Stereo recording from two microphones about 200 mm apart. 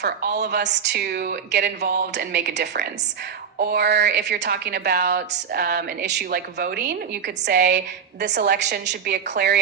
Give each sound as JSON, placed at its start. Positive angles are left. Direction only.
{"t": 0.4, "sound": "a woman's voice", "side_deg": -60}